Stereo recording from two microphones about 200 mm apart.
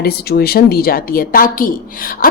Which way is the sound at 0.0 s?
50° left (ahead or behind).